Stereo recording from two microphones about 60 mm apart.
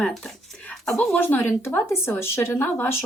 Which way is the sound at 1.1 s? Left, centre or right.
Left.